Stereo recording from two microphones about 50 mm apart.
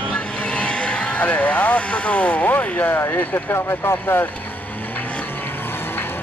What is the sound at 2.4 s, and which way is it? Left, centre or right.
Speech, left.